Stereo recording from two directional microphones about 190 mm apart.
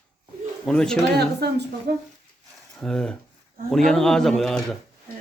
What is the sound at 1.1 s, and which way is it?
Speech, 60° right (ahead or behind).